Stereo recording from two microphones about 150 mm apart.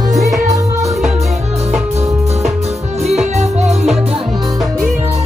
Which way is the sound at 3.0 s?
45° right (ahead or behind).